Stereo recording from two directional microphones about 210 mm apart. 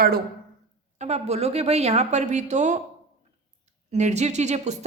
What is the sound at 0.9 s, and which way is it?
A man's voice, 30° right (ahead or behind).